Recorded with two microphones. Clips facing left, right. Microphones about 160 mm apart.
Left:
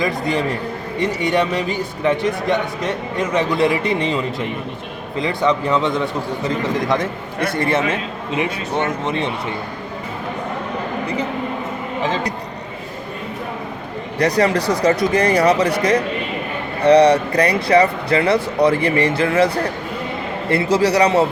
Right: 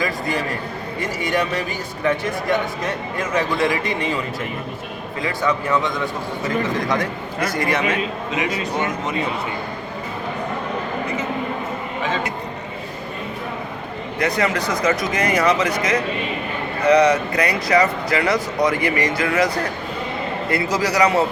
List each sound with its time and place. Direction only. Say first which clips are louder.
1.2 s speech: left 2 dB; 25° left (ahead or behind)
6.8 s speech: left 2 dB; 20° left (ahead or behind)
14.2 s speech: left 4 dB; 35° left (ahead or behind)